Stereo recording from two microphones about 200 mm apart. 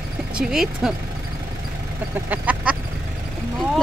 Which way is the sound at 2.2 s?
10° right (ahead or behind).